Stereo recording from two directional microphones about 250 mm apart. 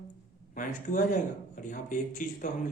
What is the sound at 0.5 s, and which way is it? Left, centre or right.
Speech, left.